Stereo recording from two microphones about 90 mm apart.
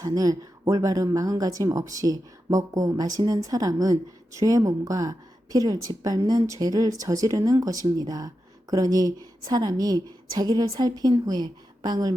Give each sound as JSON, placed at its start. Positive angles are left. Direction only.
{"t": 0.0, "sound": "a woman's voice", "side_deg": -45}